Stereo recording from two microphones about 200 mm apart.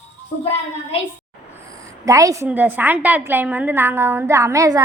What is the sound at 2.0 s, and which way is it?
A woman's voice, 15° right (ahead or behind).